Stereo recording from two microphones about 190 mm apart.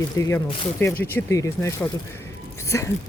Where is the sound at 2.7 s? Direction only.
15° left (ahead or behind).